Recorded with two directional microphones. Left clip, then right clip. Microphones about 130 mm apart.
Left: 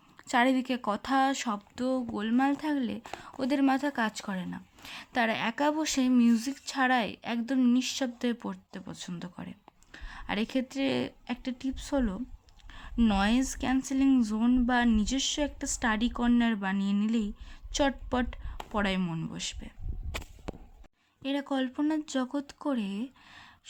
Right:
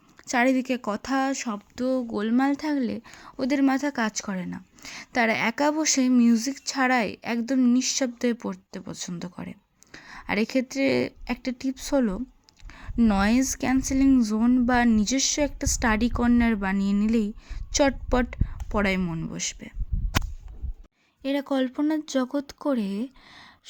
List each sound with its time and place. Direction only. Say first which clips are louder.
0.3 s speech: right 3 dB; 25° right (ahead or behind)
1.8 s speech: right 6 dB; 25° right (ahead or behind)
2.1 s a woman's voice: right 4 dB; 35° right (ahead or behind)
19.0 s speech: right 5 dB; 20° right (ahead or behind)
20.5 s a sound: left 15 dB; 40° left (ahead or behind)
21.2 s speech: right 6 dB; 30° right (ahead or behind)